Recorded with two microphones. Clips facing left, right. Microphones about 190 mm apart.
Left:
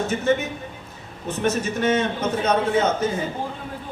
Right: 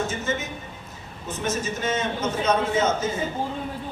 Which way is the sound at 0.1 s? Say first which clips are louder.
Left 7 dB; 60° left (ahead or behind).